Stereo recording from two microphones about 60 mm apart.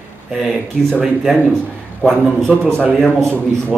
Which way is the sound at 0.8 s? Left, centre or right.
Centre.